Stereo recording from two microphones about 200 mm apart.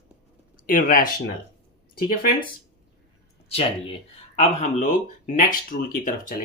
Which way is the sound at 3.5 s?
30° left (ahead or behind).